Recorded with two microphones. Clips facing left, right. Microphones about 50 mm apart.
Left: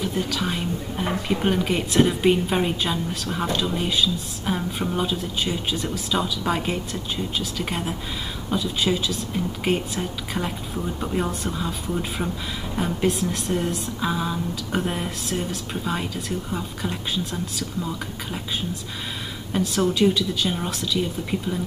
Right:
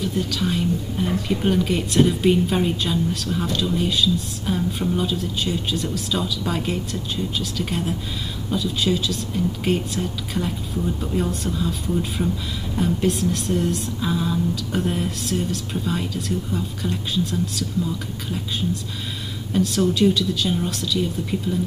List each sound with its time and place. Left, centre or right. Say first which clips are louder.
0.0 s speech: right 1 dB; centre
19.5 s speech: right 2 dB; centre